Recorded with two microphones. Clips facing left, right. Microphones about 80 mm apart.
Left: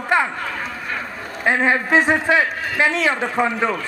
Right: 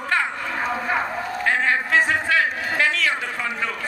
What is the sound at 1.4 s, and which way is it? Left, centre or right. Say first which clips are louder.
A man's voice: left 4 dB; left.